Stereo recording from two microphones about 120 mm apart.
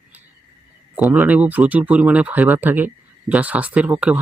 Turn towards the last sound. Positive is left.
turn(degrees=-10)  # may be behind; listen again after turning